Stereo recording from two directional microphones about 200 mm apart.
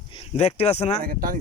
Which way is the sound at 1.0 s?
45° right (ahead or behind).